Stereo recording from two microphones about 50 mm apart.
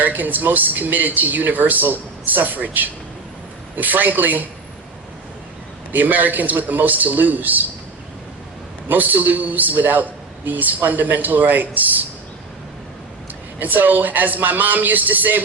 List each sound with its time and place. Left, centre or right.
0.0 s a man's voice: right
5.9 s a man's voice: right
8.9 s a man's voice: right
13.6 s a man's voice: right